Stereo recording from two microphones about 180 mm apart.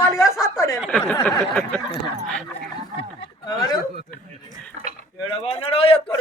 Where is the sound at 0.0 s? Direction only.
15° left (ahead or behind).